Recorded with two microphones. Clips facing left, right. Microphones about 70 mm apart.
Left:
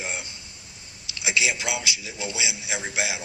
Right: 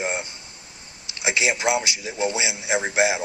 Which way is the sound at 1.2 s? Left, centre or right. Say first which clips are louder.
Right 3 dB; right.